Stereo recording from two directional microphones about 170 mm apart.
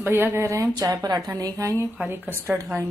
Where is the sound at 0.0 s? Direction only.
15° right (ahead or behind).